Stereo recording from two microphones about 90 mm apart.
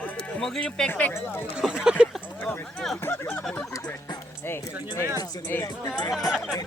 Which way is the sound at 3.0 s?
20° left (ahead or behind).